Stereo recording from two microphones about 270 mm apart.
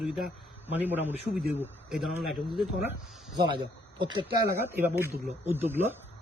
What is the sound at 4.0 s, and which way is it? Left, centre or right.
Speech, centre.